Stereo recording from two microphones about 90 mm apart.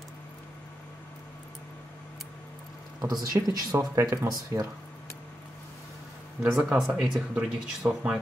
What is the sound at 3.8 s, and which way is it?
Speech, 35° right (ahead or behind).